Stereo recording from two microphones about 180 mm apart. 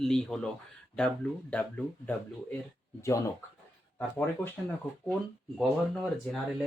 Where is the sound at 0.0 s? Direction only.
5° left (ahead or behind).